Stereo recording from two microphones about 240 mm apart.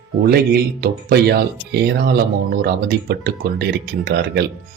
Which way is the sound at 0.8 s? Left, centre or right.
Right.